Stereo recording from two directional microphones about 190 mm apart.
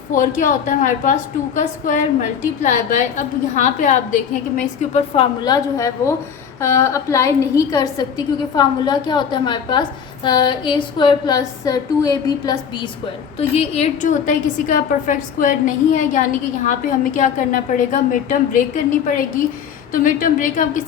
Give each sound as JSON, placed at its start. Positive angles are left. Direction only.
{"t": 0.1, "sound": "a woman's voice", "side_deg": 45}
{"t": 5.7, "sound": "a woman's voice", "side_deg": 15}
{"t": 13.5, "sound": "a woman's voice", "side_deg": 35}
{"t": 19.9, "sound": "a woman's voice", "side_deg": 45}